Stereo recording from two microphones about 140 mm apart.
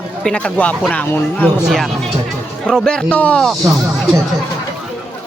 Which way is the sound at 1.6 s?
Centre (ahead or behind).